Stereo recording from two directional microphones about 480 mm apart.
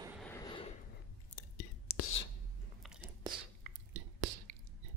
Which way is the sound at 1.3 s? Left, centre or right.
Left.